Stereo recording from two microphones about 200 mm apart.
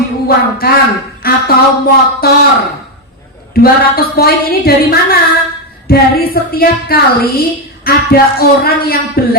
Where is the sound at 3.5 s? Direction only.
50° left (ahead or behind).